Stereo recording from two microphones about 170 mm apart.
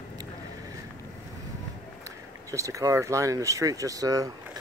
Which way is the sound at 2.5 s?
20° right (ahead or behind).